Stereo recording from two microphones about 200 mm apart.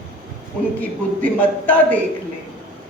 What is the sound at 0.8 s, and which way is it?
A woman's voice, 5° left (ahead or behind).